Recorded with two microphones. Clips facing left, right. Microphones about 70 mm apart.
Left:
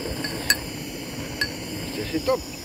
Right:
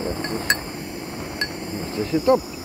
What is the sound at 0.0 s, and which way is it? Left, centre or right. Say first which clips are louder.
Chink: right 4 dB; right.